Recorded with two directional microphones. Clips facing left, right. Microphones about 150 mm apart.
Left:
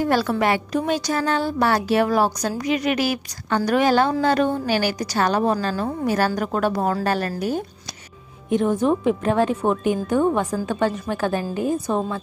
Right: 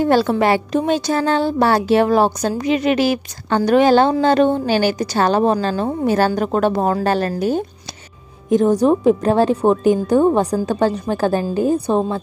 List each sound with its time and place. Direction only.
0.0 s a woman's voice: 25° right (ahead or behind)
8.5 s a woman's voice: 40° right (ahead or behind)